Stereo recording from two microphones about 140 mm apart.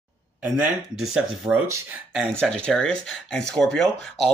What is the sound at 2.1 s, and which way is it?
Speech, 5° left (ahead or behind).